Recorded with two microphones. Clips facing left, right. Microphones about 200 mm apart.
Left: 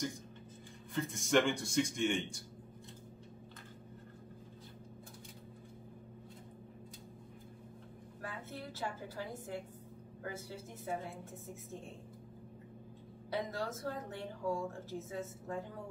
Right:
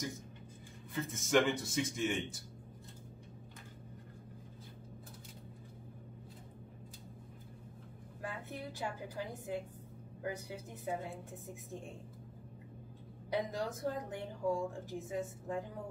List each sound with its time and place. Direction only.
0.9 s a man's voice: centre (ahead or behind)
8.2 s a sound: 15° right (ahead or behind)
10.2 s a woman's voice: 15° right (ahead or behind)
13.3 s a woman's voice: 15° right (ahead or behind)